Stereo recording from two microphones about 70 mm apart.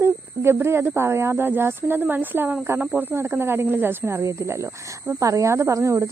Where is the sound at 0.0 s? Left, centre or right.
Right.